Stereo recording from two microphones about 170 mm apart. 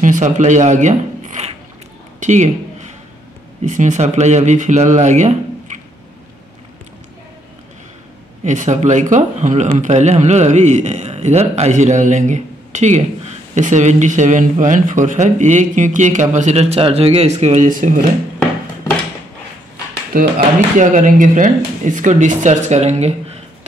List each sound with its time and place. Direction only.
0.0 s speech: 45° right (ahead or behind)
2.1 s a sound: 45° right (ahead or behind)
3.6 s a man's voice: 45° right (ahead or behind)
8.5 s a man's voice: 45° right (ahead or behind)
20.1 s a man's voice: 55° right (ahead or behind); by 23.1 s 40° right (ahead or behind)